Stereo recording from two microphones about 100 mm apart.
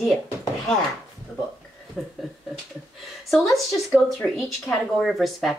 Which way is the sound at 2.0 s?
5° left (ahead or behind).